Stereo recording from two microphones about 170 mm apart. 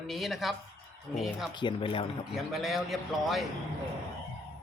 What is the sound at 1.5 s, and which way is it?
Speech, 30° left (ahead or behind).